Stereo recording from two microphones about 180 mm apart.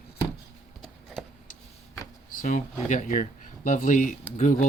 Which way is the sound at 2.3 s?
45° left (ahead or behind).